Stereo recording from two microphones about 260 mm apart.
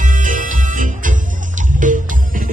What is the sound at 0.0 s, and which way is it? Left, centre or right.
Music, right.